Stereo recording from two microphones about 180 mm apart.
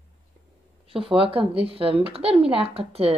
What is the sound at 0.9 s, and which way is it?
Speech, 30° right (ahead or behind).